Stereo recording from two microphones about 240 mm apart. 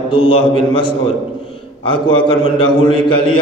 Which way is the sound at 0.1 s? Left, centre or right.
Left.